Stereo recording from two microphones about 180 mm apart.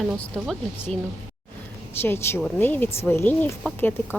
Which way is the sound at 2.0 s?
15° left (ahead or behind).